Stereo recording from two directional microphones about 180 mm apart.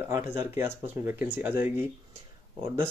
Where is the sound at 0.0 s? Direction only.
15° right (ahead or behind).